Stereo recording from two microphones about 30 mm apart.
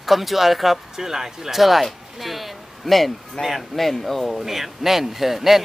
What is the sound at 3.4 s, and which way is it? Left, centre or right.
Speech, left.